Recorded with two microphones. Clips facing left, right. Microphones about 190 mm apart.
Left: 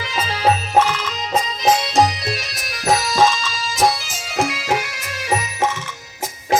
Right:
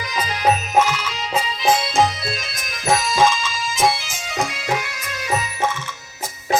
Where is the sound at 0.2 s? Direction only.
35° left (ahead or behind).